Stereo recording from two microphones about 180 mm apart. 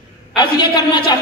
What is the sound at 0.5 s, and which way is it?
Speech, 25° left (ahead or behind).